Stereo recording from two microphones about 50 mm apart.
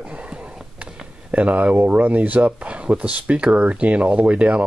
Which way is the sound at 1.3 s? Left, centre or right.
Right.